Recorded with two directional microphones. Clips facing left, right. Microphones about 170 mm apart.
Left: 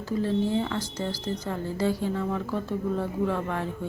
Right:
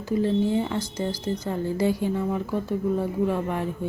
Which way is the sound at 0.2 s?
20° right (ahead or behind).